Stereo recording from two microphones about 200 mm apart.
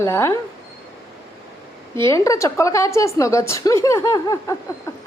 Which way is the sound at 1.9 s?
15° left (ahead or behind).